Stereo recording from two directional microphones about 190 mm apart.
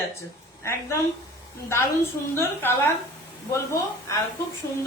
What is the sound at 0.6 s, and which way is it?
Speech, 15° left (ahead or behind).